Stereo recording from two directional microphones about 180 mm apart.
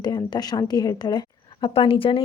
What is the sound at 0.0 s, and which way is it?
A woman's voice, 25° left (ahead or behind).